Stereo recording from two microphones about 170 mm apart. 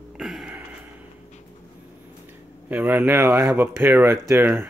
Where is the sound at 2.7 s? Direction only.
10° right (ahead or behind).